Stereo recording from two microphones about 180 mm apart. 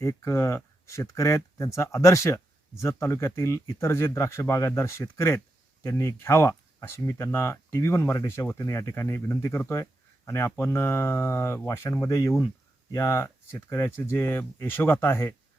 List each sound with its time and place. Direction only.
0.0 s speech: 15° left (ahead or behind)